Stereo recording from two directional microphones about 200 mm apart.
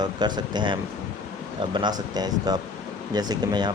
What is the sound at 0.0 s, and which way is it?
Speech, 20° right (ahead or behind).